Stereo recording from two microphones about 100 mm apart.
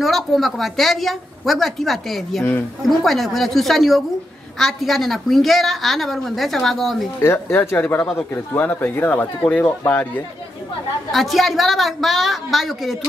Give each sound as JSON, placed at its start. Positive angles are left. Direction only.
{"t": 0.0, "sound": "a woman's voice", "side_deg": 0}
{"t": 7.5, "sound": "speech", "side_deg": 20}
{"t": 11.1, "sound": "a woman's voice", "side_deg": 0}